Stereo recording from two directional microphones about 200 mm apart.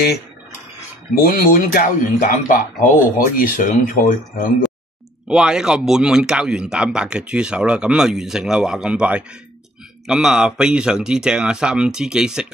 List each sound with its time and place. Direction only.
1.1 s speech: 45° left (ahead or behind)
5.3 s speech: 5° right (ahead or behind)